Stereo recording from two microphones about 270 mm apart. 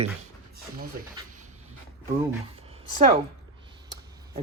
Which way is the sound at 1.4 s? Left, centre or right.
Right.